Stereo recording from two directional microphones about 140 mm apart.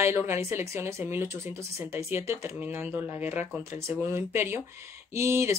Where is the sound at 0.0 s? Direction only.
20° right (ahead or behind).